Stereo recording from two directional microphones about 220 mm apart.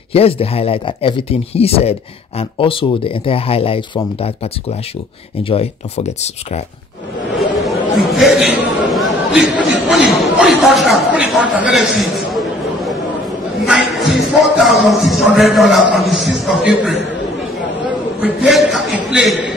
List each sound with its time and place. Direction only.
0.1 s speech: 25° left (ahead or behind)
7.3 s chatter: centre (ahead or behind)
8.2 s a man's voice: centre (ahead or behind)
13.7 s speech: centre (ahead or behind)
18.2 s speech: centre (ahead or behind)